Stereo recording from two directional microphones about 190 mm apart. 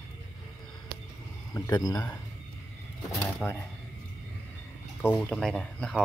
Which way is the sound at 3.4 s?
5° left (ahead or behind).